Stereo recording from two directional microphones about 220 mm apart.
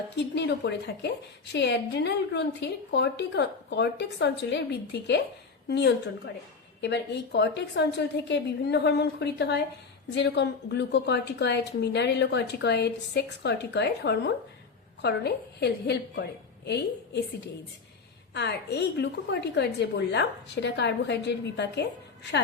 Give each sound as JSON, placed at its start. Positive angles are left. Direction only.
{"t": 0.2, "sound": "a woman's voice", "side_deg": 50}
{"t": 18.3, "sound": "a woman's voice", "side_deg": 50}